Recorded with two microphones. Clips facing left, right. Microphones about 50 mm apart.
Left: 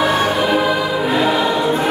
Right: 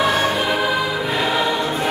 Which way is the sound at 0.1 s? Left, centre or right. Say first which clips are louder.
Left 3 dB; centre.